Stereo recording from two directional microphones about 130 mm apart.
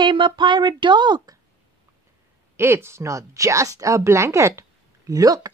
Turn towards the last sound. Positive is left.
turn(degrees=-30)  # may be behind; listen again after turning